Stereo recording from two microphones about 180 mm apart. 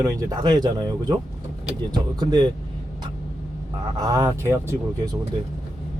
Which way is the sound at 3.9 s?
20° right (ahead or behind).